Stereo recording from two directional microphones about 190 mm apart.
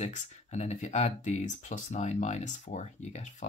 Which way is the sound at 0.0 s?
35° left (ahead or behind).